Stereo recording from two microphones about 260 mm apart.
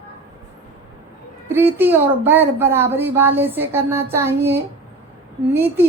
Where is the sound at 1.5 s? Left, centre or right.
Centre.